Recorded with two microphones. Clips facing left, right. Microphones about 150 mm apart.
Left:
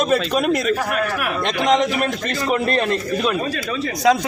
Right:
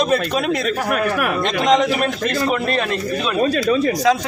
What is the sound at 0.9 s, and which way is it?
Speech, 45° right (ahead or behind).